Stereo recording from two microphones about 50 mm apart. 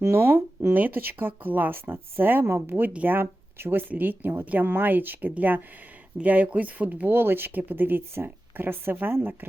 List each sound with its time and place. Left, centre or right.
0.0 s speech: right
0.7 s speech: right
3.2 s speech: right
7.1 s speech: right